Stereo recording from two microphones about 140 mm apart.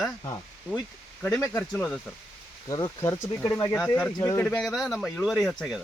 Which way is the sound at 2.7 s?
25° left (ahead or behind).